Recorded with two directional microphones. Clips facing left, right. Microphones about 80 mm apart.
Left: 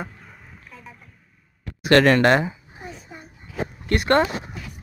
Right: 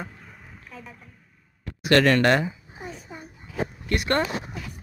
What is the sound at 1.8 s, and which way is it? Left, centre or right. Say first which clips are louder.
Speech: left 3 dB; left.